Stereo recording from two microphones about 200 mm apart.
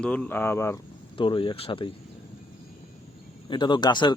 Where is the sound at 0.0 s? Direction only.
5° left (ahead or behind).